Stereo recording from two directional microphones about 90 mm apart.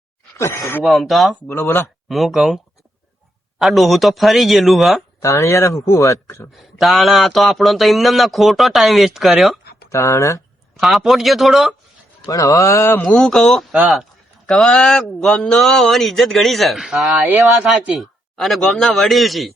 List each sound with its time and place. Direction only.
0.3 s speech: 35° left (ahead or behind)
0.9 s speech: centre (ahead or behind)
1.5 s speech: 35° left (ahead or behind)
2.0 s speech: centre (ahead or behind)
3.6 s speech: centre (ahead or behind)
5.2 s speech: 35° left (ahead or behind)
6.6 s speech: centre (ahead or behind)
9.9 s speech: 35° left (ahead or behind)
10.8 s speech: centre (ahead or behind)
12.2 s speech: 40° left (ahead or behind)
13.1 s speech: 5° left (ahead or behind)
17.2 s speech: 20° right (ahead or behind)
17.9 s speech: centre (ahead or behind)